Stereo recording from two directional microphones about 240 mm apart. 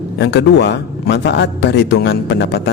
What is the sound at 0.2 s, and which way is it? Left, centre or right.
A woman's voice, left.